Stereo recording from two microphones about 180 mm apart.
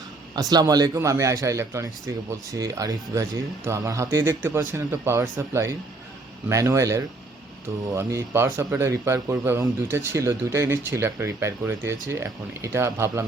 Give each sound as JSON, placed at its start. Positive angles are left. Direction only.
{"t": 0.3, "sound": "a man's voice", "side_deg": -20}